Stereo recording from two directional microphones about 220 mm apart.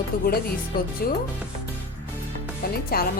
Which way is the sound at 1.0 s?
40° left (ahead or behind).